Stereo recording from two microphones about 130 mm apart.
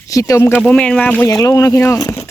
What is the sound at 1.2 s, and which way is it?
Speech, 25° left (ahead or behind).